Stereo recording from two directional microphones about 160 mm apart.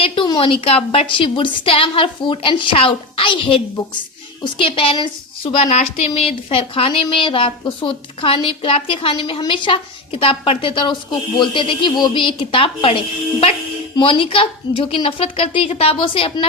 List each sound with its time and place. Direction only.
0.0 s speech: 35° left (ahead or behind)